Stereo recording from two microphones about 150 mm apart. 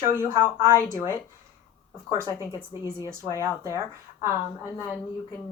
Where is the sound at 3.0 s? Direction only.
25° left (ahead or behind).